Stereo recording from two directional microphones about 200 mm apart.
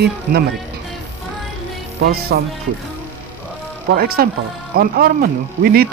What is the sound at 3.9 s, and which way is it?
Speech, 50° right (ahead or behind).